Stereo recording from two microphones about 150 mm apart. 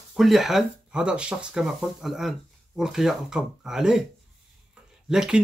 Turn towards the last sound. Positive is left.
turn(degrees=-5)  # may be behind; listen again after turning